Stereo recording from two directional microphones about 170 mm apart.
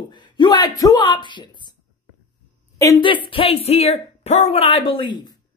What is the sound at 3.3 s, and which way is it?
Speech, 35° left (ahead or behind).